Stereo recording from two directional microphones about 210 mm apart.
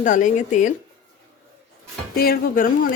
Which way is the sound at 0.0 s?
35° left (ahead or behind).